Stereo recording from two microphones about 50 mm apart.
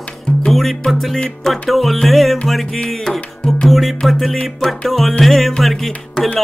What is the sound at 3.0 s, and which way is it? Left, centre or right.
Music, centre.